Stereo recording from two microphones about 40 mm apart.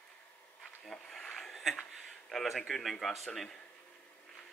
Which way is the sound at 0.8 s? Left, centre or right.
Centre.